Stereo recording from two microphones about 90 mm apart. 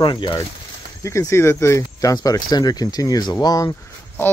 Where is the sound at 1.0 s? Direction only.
30° left (ahead or behind).